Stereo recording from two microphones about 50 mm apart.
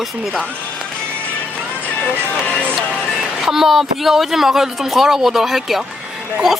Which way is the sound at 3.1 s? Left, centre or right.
Centre.